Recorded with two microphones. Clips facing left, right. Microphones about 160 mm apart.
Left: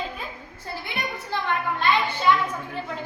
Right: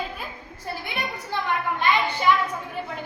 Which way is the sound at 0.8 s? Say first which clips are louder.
Even; 20° right (ahead or behind).